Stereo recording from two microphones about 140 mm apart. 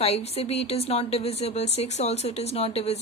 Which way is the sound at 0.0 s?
45° left (ahead or behind).